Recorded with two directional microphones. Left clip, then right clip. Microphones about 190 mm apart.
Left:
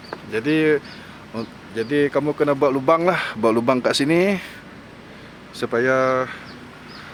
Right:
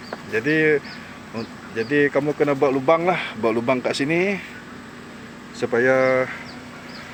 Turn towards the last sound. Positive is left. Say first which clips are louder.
# right 1 dB
turn(degrees=10)  # may be behind; listen again after turning